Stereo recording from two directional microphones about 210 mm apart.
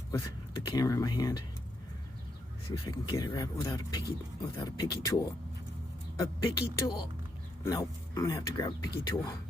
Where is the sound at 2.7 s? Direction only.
20° left (ahead or behind).